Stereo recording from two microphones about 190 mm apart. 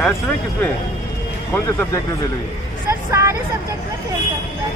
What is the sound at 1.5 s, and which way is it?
Speech, 15° left (ahead or behind).